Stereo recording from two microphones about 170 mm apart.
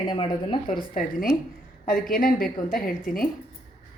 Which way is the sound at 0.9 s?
55° left (ahead or behind).